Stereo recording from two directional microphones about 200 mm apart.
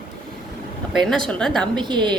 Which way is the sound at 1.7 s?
20° right (ahead or behind).